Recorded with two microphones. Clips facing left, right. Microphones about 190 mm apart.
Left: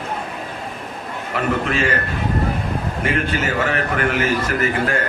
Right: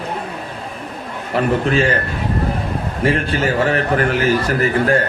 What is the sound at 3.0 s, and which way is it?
A man's voice, 35° right (ahead or behind).